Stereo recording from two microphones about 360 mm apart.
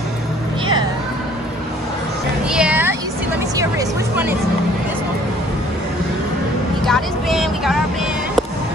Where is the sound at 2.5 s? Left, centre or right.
Centre.